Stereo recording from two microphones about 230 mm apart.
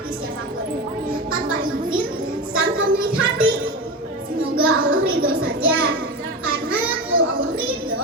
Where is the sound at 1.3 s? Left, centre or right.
Right.